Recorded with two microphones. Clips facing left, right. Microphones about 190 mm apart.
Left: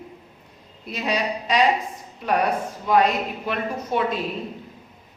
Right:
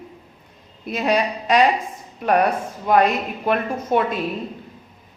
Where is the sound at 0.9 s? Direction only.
50° right (ahead or behind).